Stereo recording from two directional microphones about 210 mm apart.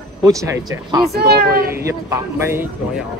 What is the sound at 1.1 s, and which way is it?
Speech, 50° right (ahead or behind).